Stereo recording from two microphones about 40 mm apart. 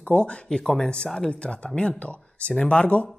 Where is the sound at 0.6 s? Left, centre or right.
Centre.